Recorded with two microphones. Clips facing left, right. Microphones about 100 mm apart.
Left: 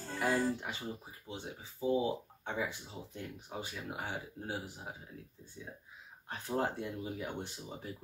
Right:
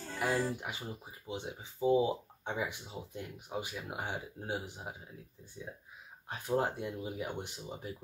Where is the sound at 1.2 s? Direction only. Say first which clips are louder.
Right 4 dB; 20° right (ahead or behind).